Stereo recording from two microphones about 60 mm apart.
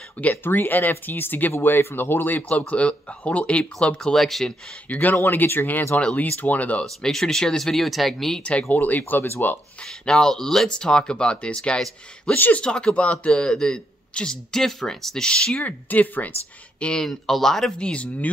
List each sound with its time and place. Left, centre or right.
0.3 s a man's voice: left; by 4.6 s centre
4.8 s speech: left
5.9 s speech: left
7.0 s speech: centre
8.4 s speech: centre
8.6 s speech: left
9.8 s a man's voice: centre
12.4 s speech: left
12.6 s a man's voice: centre
15.6 s speech: left
16.8 s speech: centre
17.7 s speech: centre